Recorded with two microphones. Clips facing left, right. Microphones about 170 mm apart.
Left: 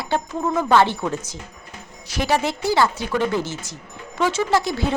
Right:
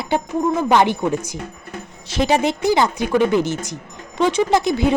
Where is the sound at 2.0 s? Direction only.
25° right (ahead or behind).